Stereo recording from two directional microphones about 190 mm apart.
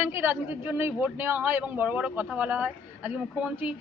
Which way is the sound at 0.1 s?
10° right (ahead or behind).